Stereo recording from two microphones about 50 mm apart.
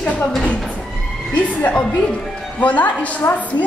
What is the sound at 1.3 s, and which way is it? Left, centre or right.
A woman's voice, left.